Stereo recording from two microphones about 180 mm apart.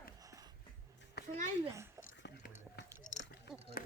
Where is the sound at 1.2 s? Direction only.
65° left (ahead or behind).